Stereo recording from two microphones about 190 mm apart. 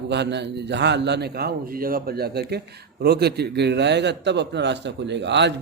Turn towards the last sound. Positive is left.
turn(degrees=-65)  # may be behind; listen again after turning